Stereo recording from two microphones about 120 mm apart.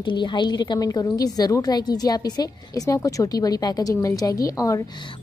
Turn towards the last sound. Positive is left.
turn(degrees=25)  # may be behind; listen again after turning